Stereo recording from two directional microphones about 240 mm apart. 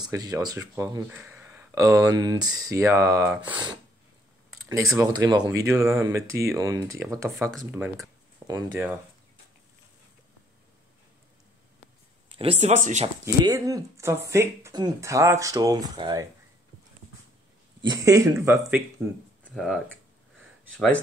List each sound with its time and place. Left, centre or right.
0.0 s speech: centre
4.9 s speech: centre
7.5 s speech: centre
12.3 s speech: right
13.2 s speech: centre
17.8 s speech: centre